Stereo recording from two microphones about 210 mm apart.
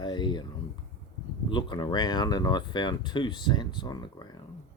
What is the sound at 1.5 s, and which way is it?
Speech, 20° left (ahead or behind).